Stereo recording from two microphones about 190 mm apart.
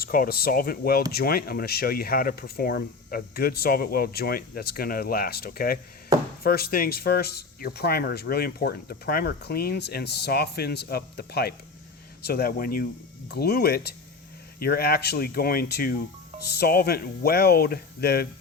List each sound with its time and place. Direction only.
0.0 s speech: 50° left (ahead or behind)